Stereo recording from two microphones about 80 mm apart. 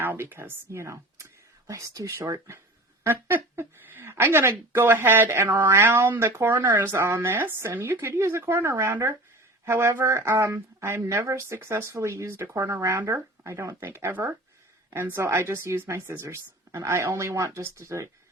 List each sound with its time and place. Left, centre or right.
0.0 s speech: right
3.0 s speech: right